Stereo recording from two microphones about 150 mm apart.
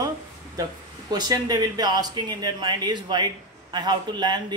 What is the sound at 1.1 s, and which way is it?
Speech, 25° right (ahead or behind).